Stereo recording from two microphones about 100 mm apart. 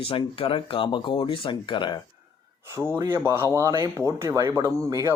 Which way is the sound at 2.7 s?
25° right (ahead or behind).